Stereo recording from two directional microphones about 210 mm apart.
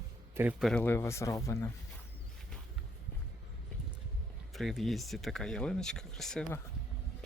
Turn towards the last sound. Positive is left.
turn(degrees=5)  # may be behind; listen again after turning